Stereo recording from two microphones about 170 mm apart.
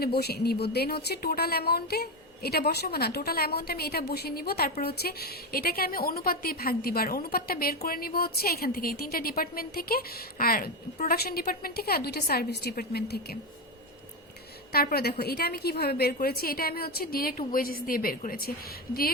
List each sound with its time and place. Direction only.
0.0 s a woman's voice: 70° left (ahead or behind)
14.7 s a woman's voice: 65° left (ahead or behind)